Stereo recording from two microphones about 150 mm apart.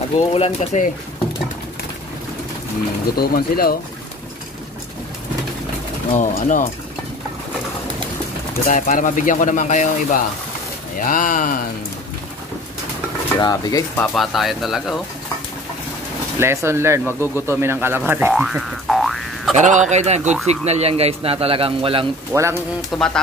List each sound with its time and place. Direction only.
0.3 s speech: 40° left (ahead or behind)
3.2 s speech: 85° left
6.1 s speech: 55° left (ahead or behind)
8.6 s speech: 60° left (ahead or behind)
13.4 s speech: 25° left (ahead or behind)
14.1 s speech: centre (ahead or behind)
16.3 s speech: 15° right (ahead or behind)
18.3 s boing: centre (ahead or behind)
19.5 s speech: 55° right (ahead or behind); by 22.0 s 40° right (ahead or behind)
22.3 s speech: 20° right (ahead or behind)
22.9 s speech: 5° left (ahead or behind)